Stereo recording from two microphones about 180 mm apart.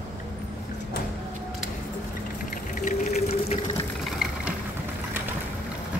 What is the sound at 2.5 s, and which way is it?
Sewing machine, 45° left (ahead or behind).